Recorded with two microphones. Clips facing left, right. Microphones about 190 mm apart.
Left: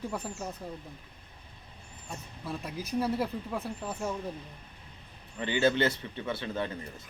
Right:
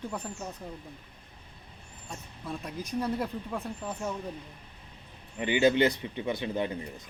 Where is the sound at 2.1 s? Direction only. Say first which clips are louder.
Even; centre (ahead or behind).